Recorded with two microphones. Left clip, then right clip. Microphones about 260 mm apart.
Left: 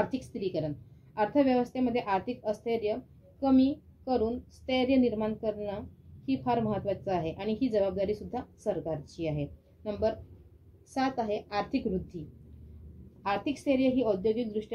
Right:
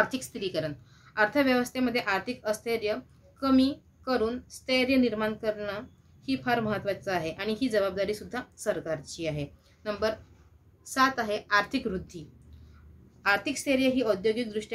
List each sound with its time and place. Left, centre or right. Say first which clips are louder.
0.0 s a woman's voice: right 3 dB; centre